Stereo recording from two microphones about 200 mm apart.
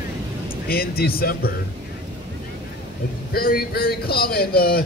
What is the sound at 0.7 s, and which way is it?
Speech, 50° left (ahead or behind).